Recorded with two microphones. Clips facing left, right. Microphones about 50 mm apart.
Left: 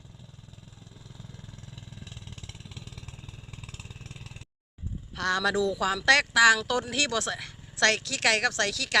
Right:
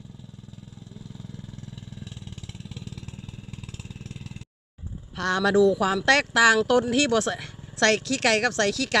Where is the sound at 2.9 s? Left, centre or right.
Left.